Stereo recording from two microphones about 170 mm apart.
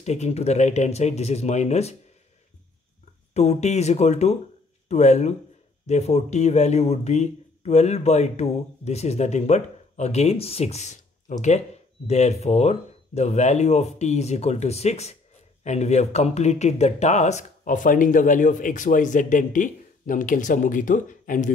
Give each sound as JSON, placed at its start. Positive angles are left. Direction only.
{"t": 0.0, "sound": "speech", "side_deg": 40}
{"t": 3.3, "sound": "speech", "side_deg": 40}